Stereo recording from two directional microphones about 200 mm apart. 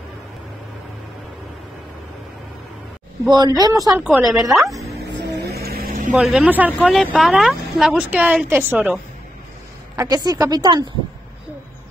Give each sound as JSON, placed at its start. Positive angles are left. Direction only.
{"t": 3.3, "sound": "speech", "side_deg": -20}
{"t": 5.4, "sound": "vehicle", "side_deg": -50}
{"t": 6.1, "sound": "speech", "side_deg": 0}
{"t": 9.9, "sound": "speech", "side_deg": -20}